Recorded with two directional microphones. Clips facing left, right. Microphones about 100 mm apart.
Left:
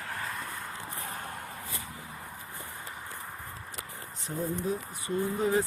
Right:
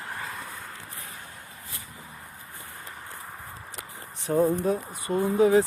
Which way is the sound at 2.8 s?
Centre (ahead or behind).